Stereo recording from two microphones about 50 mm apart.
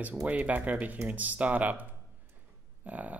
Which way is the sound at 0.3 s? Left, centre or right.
Right.